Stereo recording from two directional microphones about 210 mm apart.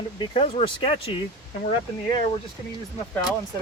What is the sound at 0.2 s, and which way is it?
Speech, 25° left (ahead or behind).